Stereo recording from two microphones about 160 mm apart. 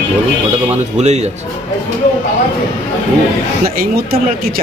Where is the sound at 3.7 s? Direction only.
70° right (ahead or behind).